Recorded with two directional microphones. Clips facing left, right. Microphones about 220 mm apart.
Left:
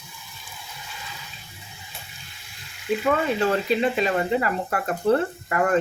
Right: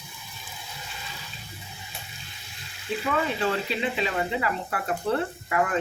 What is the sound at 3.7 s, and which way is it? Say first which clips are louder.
Speech: left 6 dB; 45° left (ahead or behind).